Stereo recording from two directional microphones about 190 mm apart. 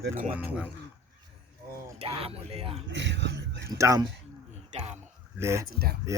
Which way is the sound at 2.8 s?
70° right (ahead or behind).